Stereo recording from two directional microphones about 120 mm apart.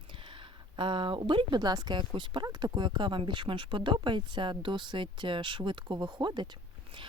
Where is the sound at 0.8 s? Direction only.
45° right (ahead or behind).